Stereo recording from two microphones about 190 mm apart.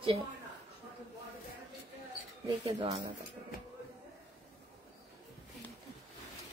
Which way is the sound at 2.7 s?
30° right (ahead or behind).